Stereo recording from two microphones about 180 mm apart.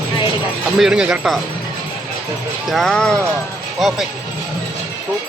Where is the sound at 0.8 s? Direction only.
5° right (ahead or behind).